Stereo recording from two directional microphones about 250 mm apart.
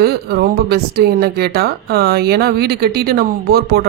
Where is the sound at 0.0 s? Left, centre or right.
Right.